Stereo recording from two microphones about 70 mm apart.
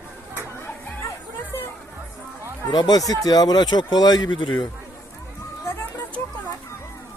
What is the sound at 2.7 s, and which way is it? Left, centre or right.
Speech, left.